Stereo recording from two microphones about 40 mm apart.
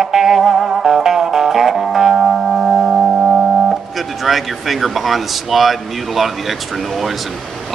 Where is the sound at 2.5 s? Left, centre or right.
Centre.